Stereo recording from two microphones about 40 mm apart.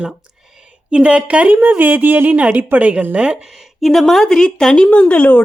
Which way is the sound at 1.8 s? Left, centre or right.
Right.